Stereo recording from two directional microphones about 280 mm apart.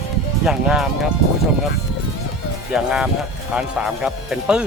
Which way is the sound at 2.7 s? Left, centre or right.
Centre.